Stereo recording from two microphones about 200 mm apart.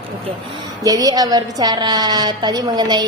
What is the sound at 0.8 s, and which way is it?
A woman's voice, 20° right (ahead or behind).